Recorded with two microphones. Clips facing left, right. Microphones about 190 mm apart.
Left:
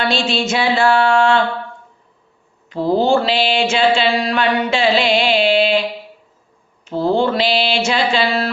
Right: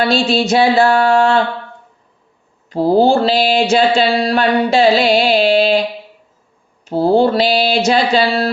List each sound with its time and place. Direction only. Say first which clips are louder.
0.0 s mantra: right 4 dB; 40° right (ahead or behind)
2.6 s mantra: right 4 dB; 40° right (ahead or behind)
6.8 s mantra: right 4 dB; 40° right (ahead or behind)